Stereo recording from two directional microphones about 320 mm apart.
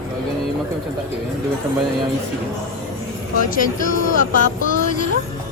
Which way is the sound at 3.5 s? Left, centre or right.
Left.